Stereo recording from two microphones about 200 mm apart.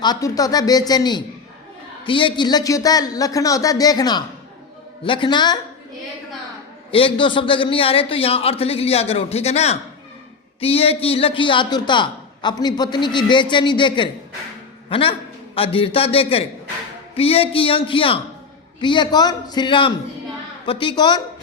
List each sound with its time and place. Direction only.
0.0 s a man's voice: 20° left (ahead or behind)
6.9 s a man's voice: 25° left (ahead or behind)